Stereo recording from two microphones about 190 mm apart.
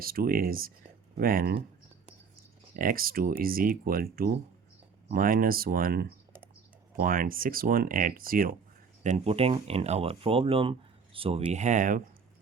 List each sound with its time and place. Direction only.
0.0 s speech: 50° right (ahead or behind)
2.7 s speech: 50° right (ahead or behind)
9.0 s speech: 35° right (ahead or behind)